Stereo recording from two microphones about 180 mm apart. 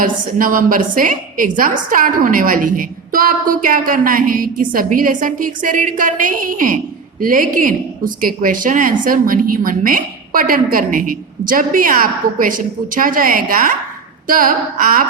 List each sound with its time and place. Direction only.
0.0 s a woman's voice: 50° right (ahead or behind)